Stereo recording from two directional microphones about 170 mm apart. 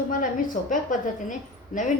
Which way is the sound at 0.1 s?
50° left (ahead or behind).